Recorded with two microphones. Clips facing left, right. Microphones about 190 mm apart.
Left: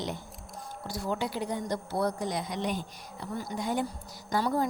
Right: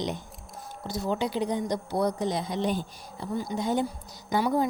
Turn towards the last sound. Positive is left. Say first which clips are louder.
# right 3 dB
turn(degrees=-15)  # may be behind; listen again after turning